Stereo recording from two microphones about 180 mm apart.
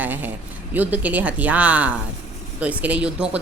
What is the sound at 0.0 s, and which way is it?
Speech, 10° right (ahead or behind).